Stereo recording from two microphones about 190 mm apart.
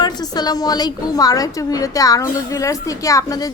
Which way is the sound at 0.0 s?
20° left (ahead or behind).